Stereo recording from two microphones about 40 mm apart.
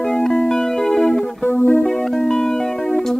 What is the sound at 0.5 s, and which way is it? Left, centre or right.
Music, centre.